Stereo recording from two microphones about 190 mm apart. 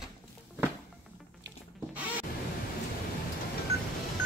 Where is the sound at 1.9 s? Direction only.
10° right (ahead or behind).